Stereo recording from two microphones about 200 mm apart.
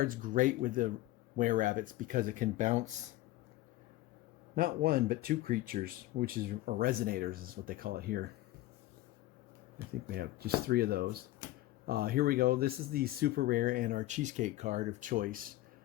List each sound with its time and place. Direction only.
0.0 s speech: 45° right (ahead or behind)
4.5 s speech: 45° right (ahead or behind)
10.1 s speech: 50° right (ahead or behind)